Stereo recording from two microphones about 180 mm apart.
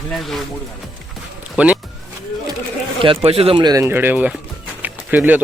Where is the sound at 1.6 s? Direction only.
5° right (ahead or behind).